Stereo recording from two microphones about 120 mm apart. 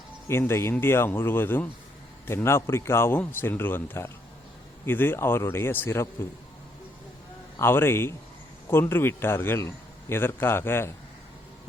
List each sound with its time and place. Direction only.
0.3 s a man's voice: 20° left (ahead or behind)
7.6 s a man's voice: 20° left (ahead or behind)